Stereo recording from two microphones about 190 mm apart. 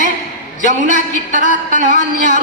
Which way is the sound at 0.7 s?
40° right (ahead or behind).